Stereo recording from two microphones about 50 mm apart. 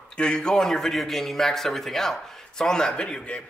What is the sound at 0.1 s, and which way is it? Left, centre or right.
Speech, centre.